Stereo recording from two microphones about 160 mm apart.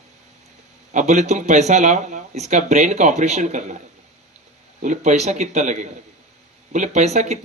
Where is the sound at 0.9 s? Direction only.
50° right (ahead or behind).